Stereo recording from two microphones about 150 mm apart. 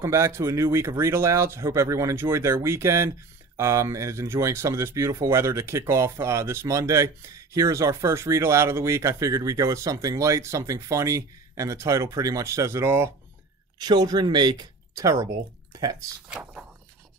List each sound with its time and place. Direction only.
0.0 s speech: 20° right (ahead or behind)
13.7 s speech: 25° right (ahead or behind)
16.3 s speech: 5° right (ahead or behind)